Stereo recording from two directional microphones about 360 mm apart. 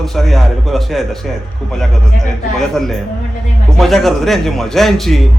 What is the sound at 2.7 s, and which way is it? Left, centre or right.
A man's voice, centre.